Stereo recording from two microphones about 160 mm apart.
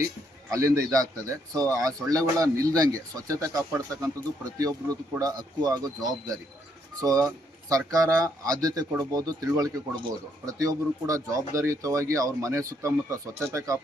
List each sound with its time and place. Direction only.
0.5 s speech: 20° right (ahead or behind)